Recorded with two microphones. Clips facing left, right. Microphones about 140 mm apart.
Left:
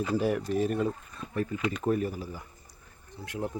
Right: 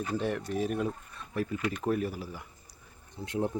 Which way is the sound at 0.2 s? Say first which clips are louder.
Left 3 dB; 5° left (ahead or behind).